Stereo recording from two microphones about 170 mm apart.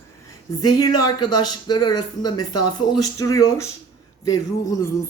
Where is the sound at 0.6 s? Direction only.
20° left (ahead or behind).